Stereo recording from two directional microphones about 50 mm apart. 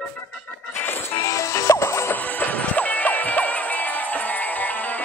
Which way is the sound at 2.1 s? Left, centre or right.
Left.